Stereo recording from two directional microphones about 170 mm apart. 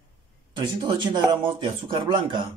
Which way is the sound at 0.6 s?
25° right (ahead or behind).